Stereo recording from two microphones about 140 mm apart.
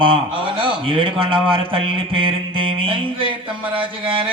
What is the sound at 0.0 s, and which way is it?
A man's voice, 40° right (ahead or behind).